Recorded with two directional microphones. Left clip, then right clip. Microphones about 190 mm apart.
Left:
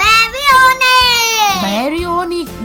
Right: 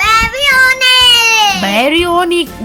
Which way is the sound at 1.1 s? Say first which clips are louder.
Right 4 dB; 30° left (ahead or behind).